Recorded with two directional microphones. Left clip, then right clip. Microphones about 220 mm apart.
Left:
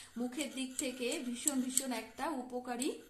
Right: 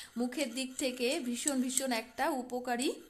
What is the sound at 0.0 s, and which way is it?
A woman's voice, 45° right (ahead or behind).